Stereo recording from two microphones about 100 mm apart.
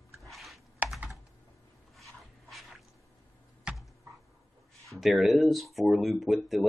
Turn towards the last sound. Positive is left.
turn(degrees=0)  # may be behind; listen again after turning